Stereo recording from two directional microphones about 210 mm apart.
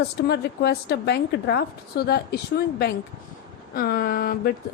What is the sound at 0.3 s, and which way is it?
Speech, 50° left (ahead or behind).